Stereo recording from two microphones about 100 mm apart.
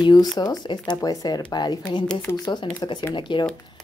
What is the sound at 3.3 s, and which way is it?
Speech, 55° left (ahead or behind).